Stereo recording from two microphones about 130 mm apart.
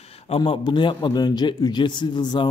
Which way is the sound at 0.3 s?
40° left (ahead or behind).